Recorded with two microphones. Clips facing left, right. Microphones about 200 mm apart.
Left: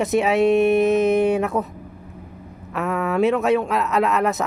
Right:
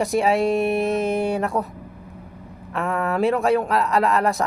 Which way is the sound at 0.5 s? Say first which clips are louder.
Left 5 dB; 35° right (ahead or behind).